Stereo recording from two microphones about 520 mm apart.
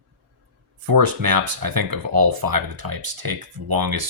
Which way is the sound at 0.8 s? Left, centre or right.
Right.